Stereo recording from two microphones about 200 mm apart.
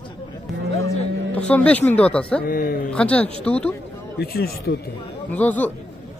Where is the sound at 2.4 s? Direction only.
45° left (ahead or behind).